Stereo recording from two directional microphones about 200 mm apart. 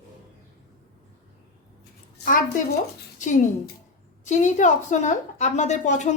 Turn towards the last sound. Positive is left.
turn(degrees=35)  # may be behind; listen again after turning